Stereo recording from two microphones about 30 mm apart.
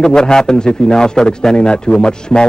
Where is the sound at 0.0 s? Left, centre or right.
Left.